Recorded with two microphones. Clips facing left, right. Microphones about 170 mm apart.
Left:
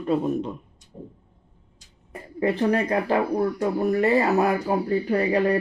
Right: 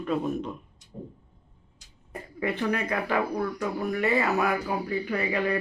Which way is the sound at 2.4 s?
35° left (ahead or behind).